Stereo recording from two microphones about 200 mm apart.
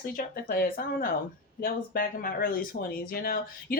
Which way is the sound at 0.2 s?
45° left (ahead or behind).